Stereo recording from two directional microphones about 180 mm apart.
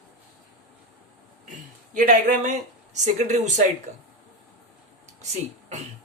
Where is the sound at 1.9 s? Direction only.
45° right (ahead or behind).